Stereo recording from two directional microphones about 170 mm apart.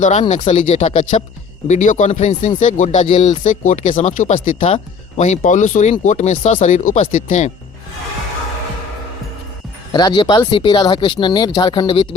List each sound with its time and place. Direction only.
0.0 s speech: 40° left (ahead or behind)
9.9 s speech: 25° left (ahead or behind)